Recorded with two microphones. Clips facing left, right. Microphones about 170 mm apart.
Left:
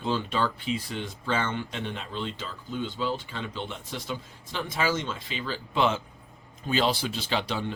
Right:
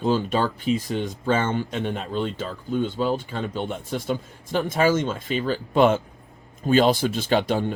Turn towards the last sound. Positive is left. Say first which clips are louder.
# right 8 dB
turn(degrees=-50)  # may be behind; listen again after turning